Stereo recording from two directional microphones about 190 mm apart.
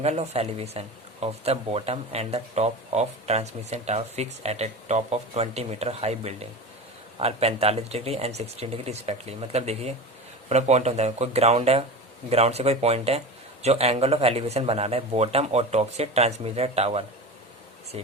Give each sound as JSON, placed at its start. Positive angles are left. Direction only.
{"t": 0.0, "sound": "speech", "side_deg": -35}